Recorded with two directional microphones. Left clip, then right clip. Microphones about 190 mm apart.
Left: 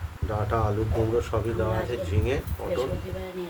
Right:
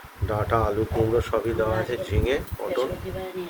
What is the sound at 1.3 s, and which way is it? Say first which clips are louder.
Speech: right 4 dB; 20° right (ahead or behind).